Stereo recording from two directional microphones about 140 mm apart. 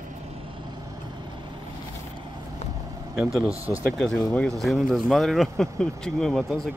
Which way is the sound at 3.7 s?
25° right (ahead or behind).